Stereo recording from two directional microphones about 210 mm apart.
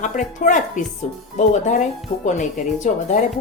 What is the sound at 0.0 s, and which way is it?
Speech, 35° left (ahead or behind).